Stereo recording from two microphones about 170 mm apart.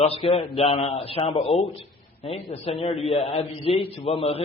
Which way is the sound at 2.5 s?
35° left (ahead or behind).